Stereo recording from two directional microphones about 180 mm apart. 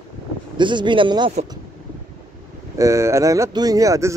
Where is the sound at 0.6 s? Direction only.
25° right (ahead or behind).